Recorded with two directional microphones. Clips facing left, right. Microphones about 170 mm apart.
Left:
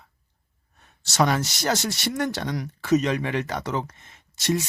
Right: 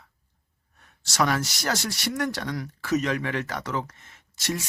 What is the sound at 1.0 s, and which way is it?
Speech, 25° left (ahead or behind).